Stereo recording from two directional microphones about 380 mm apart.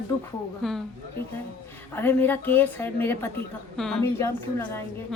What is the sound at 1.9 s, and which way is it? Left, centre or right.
A woman's voice, centre.